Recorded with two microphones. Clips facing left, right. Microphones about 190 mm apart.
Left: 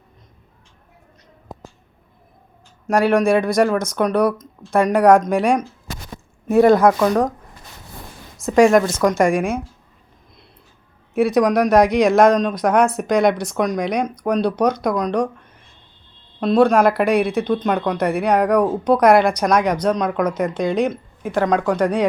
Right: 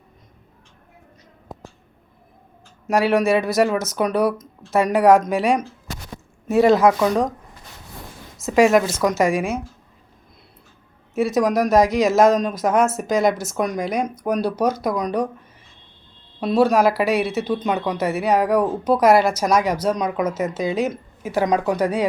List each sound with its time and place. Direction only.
2.8 s a woman's voice: 5° right (ahead or behind)
6.5 s speech: 55° left (ahead or behind)
8.4 s a woman's voice: 5° right (ahead or behind)
11.1 s a woman's voice: centre (ahead or behind)
16.4 s a woman's voice: 5° right (ahead or behind)